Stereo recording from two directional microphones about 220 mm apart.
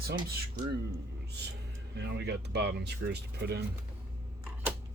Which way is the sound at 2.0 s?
50° right (ahead or behind).